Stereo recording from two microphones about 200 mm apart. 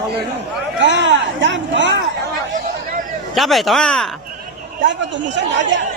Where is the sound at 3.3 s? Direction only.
Centre (ahead or behind).